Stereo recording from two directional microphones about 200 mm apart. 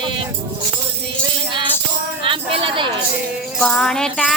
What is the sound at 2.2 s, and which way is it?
Speech, 25° right (ahead or behind).